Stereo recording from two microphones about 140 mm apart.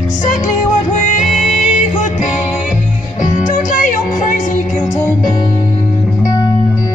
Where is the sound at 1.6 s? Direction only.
60° left (ahead or behind).